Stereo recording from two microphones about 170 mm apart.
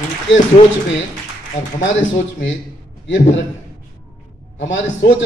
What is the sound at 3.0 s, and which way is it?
Speech, 90° left.